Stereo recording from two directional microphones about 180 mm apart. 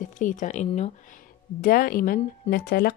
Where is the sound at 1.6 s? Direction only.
55° left (ahead or behind).